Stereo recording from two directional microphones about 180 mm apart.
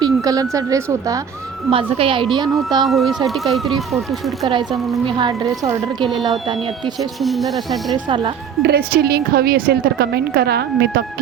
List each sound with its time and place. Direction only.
0.0 s speech: 20° right (ahead or behind)
1.7 s a woman's voice: 30° right (ahead or behind)
2.8 s speech: centre (ahead or behind)
5.0 s a woman's voice: 25° right (ahead or behind)
7.2 s speech: centre (ahead or behind)
7.9 s a woman's voice: 25° right (ahead or behind)
8.6 s a woman's voice: 60° right (ahead or behind)